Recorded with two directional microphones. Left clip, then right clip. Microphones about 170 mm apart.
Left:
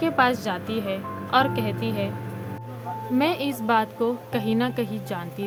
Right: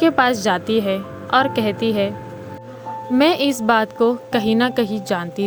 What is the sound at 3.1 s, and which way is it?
A woman's voice, 45° right (ahead or behind).